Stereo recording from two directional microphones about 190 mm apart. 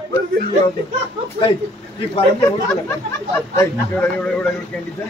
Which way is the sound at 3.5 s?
15° left (ahead or behind).